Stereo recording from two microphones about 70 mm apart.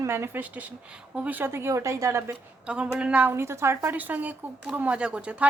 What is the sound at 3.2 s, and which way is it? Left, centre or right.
Speech, right.